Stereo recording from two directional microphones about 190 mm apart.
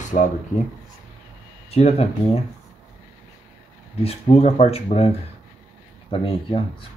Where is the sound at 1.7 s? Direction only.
35° left (ahead or behind).